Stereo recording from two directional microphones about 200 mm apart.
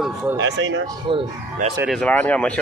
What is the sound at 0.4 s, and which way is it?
Speech, 65° right (ahead or behind).